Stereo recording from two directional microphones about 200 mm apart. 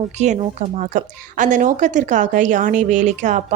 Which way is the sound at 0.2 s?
35° right (ahead or behind).